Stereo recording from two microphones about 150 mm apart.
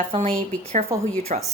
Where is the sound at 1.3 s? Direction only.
50° right (ahead or behind).